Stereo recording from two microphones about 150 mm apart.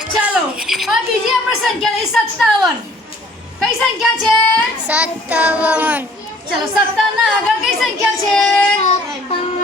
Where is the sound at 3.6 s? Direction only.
Centre (ahead or behind).